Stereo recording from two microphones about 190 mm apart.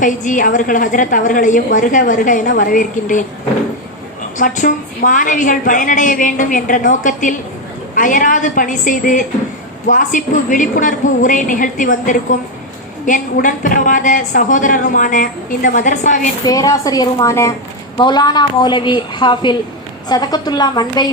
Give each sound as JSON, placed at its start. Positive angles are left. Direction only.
{"t": 0.0, "sound": "a woman's voice", "side_deg": 45}
{"t": 4.4, "sound": "a woman's voice", "side_deg": 45}
{"t": 16.4, "sound": "a woman's voice", "side_deg": 20}